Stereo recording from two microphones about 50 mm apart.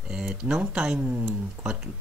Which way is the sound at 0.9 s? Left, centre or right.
Right.